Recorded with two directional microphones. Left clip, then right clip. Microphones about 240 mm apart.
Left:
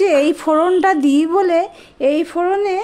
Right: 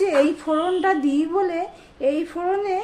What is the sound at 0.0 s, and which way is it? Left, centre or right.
A woman's voice, left.